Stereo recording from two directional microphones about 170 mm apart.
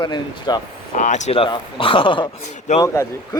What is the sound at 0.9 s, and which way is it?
Speech, 45° left (ahead or behind).